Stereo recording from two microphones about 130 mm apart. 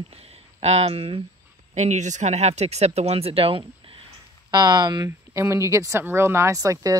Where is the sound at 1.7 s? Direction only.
65° right (ahead or behind); by 3.6 s 45° right (ahead or behind).